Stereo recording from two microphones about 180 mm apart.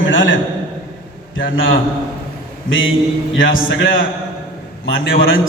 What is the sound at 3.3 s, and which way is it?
Speech, 90° left.